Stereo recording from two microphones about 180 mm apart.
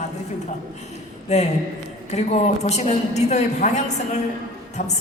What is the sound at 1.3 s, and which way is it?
A woman's voice, 40° left (ahead or behind).